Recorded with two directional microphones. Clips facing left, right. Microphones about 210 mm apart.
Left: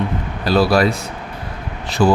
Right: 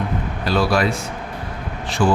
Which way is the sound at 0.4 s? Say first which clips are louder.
Left 4 dB; 35° left (ahead or behind).